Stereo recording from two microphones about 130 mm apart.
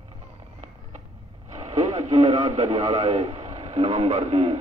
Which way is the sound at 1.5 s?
60° right (ahead or behind).